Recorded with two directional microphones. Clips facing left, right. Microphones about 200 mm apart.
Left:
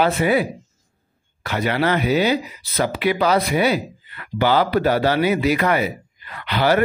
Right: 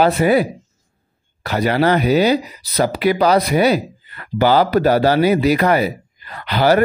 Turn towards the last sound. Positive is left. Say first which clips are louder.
# right 4 dB
turn(degrees=-40)  # may be behind; listen again after turning